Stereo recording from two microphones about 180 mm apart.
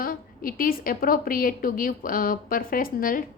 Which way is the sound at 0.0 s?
55° left (ahead or behind).